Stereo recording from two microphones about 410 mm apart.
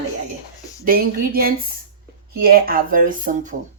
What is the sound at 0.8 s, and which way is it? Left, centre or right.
Speech, right.